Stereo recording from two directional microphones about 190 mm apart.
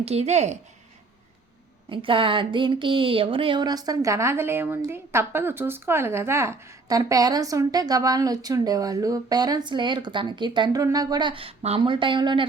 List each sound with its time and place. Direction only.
0.0 s a woman's voice: 35° right (ahead or behind)
1.9 s speech: 25° right (ahead or behind)